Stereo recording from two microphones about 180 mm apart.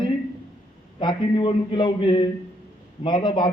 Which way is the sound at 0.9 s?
25° left (ahead or behind).